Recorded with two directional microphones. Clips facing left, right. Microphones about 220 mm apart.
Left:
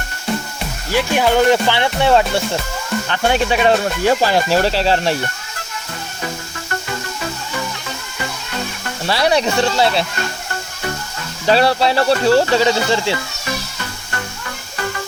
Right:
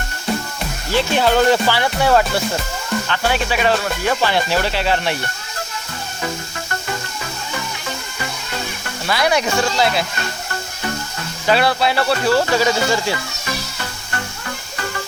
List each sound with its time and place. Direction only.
0.9 s speech: 15° left (ahead or behind); by 5.1 s 35° left (ahead or behind)
9.0 s speech: 30° left (ahead or behind)
11.4 s speech: 35° left (ahead or behind)